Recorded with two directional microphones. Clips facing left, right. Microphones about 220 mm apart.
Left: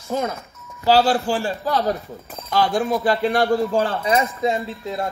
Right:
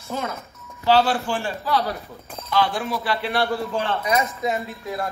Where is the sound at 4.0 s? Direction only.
30° left (ahead or behind).